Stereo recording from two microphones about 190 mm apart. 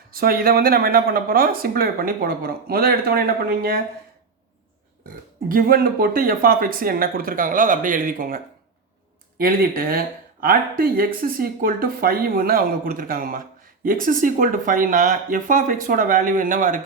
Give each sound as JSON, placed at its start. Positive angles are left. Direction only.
{"t": 0.1, "sound": "speech", "side_deg": -50}
{"t": 5.5, "sound": "speech", "side_deg": -50}
{"t": 9.4, "sound": "speech", "side_deg": -50}